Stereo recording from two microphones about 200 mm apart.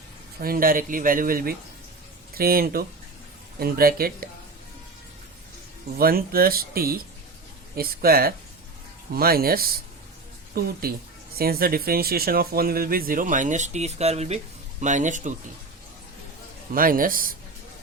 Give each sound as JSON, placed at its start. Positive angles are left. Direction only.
{"t": 0.3, "sound": "speech", "side_deg": -45}
{"t": 6.0, "sound": "speech", "side_deg": -50}
{"t": 16.7, "sound": "speech", "side_deg": -45}